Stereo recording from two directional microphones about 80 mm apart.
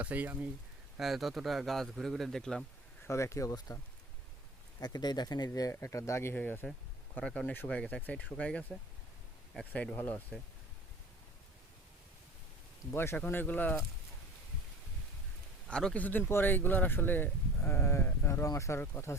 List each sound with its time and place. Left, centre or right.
0.0 s speech: right
0.9 s speech: centre
3.1 s speech: left
4.8 s speech: left
5.8 s speech: left
6.3 s speech: left
7.8 s speech: centre
9.9 s speech: left
12.9 s speech: left
15.6 s a man's voice: centre
16.0 s speech: left